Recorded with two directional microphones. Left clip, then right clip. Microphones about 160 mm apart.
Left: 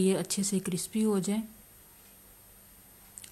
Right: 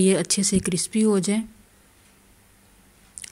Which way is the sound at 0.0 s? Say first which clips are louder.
Right 8 dB; 25° right (ahead or behind).